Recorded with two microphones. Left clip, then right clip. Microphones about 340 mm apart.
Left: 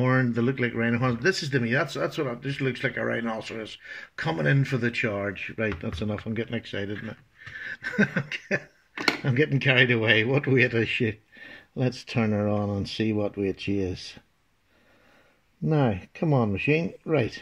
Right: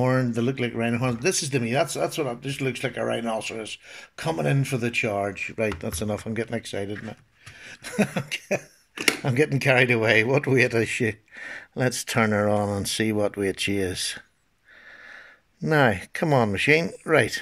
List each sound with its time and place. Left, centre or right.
0.0 s speech: centre
12.3 s speech: right
12.8 s speech: right
15.6 s speech: right
16.0 s speech: right